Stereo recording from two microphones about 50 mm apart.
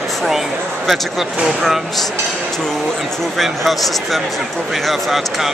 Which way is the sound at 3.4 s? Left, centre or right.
Centre.